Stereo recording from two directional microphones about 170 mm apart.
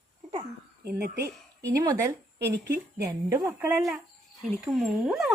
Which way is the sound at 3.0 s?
15° right (ahead or behind).